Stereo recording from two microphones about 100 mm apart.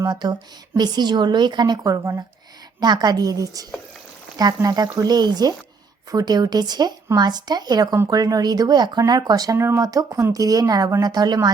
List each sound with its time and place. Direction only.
0.0 s a woman's voice: 45° right (ahead or behind)